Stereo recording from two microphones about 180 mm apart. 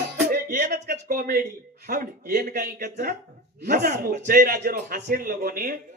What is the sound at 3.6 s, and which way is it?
A man's voice, 65° right (ahead or behind).